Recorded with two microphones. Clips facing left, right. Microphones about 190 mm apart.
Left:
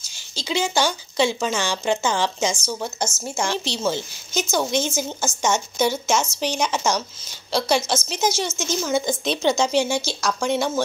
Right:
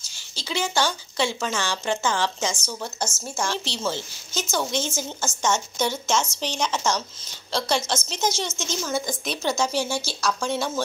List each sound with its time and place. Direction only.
0.4 s speech: 15° left (ahead or behind)
9.0 s speech: 25° left (ahead or behind)